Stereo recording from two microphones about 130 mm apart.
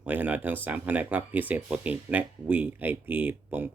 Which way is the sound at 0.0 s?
15° right (ahead or behind).